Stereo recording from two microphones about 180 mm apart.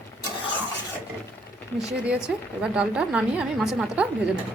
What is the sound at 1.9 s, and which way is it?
A woman's voice, 5° right (ahead or behind).